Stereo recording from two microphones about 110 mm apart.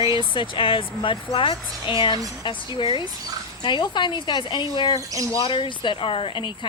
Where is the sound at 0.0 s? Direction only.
50° left (ahead or behind).